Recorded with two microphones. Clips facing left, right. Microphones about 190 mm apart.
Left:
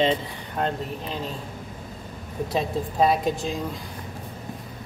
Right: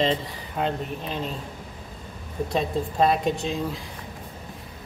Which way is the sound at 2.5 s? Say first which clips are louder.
Even; 5° left (ahead or behind).